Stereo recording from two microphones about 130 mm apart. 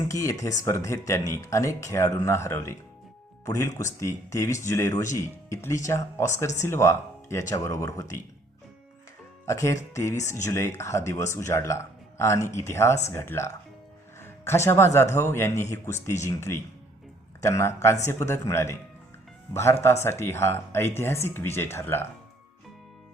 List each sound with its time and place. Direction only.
0.0 s speech: 25° left (ahead or behind)
9.5 s speech: 25° left (ahead or behind)